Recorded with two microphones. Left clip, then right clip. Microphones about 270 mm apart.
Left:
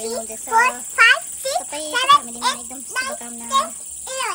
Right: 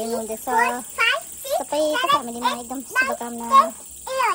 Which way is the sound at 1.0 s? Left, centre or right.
Centre.